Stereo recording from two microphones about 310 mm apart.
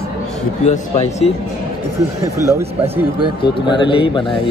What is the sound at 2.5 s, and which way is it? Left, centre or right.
Speech, centre.